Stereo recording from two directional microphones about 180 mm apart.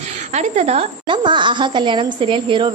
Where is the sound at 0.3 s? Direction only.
35° right (ahead or behind).